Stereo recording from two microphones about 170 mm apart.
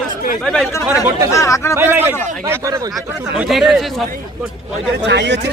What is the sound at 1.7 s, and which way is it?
Speech, 10° right (ahead or behind).